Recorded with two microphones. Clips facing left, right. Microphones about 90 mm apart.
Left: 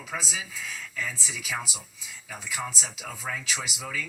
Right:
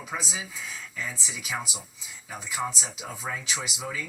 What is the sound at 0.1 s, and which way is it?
Speech, 25° right (ahead or behind).